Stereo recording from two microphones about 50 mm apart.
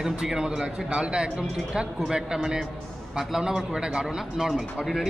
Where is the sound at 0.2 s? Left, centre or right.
Centre.